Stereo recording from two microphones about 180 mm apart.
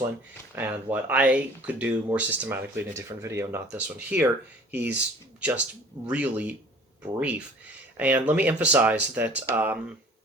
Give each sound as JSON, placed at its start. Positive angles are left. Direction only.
{"t": 0.5, "sound": "speech", "side_deg": -10}
{"t": 4.7, "sound": "speech", "side_deg": -70}
{"t": 5.4, "sound": "speech", "side_deg": -5}